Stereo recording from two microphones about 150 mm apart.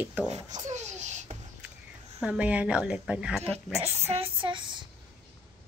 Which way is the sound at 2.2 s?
5° right (ahead or behind).